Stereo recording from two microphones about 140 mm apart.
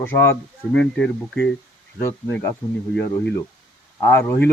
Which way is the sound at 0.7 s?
5° left (ahead or behind).